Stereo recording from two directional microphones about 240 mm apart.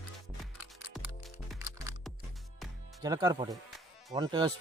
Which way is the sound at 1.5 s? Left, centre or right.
Centre.